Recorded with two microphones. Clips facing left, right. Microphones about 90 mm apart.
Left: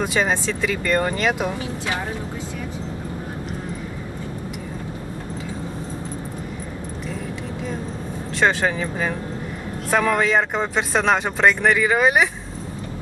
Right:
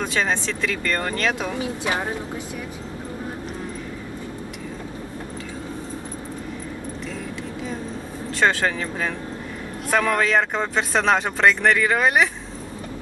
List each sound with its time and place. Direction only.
0.0 s speech: 5° left (ahead or behind)
8.4 s speech: centre (ahead or behind)